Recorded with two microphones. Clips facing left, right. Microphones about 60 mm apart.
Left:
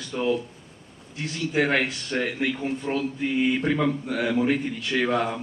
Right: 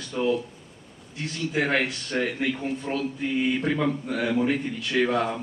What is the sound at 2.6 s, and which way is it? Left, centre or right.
Speech, centre.